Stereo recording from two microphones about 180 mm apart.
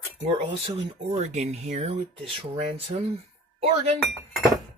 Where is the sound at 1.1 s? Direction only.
40° right (ahead or behind).